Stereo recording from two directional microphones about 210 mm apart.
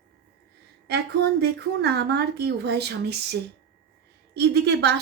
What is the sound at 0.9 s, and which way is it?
Speech, 50° right (ahead or behind).